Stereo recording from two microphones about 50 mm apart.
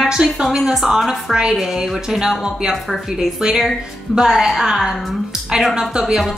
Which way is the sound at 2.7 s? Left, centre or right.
Centre.